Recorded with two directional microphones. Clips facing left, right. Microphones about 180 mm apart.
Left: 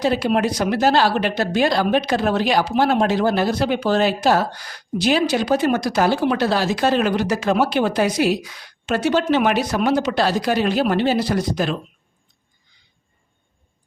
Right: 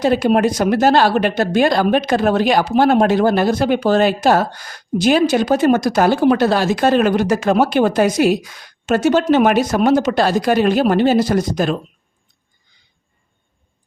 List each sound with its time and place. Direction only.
0.0 s speech: 50° right (ahead or behind)